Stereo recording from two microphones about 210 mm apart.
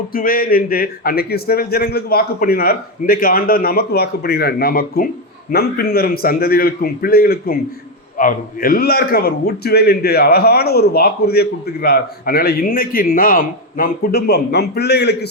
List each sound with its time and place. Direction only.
0.1 s a man's voice: 45° left (ahead or behind)